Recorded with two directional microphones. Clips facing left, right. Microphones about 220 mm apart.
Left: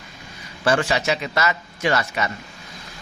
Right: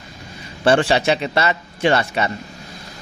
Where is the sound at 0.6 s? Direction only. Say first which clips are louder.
Right 5 dB; 30° right (ahead or behind).